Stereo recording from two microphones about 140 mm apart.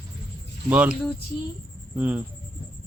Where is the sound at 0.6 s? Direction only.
10° right (ahead or behind).